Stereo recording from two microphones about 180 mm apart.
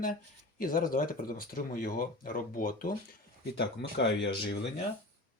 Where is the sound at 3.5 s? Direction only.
75° left (ahead or behind).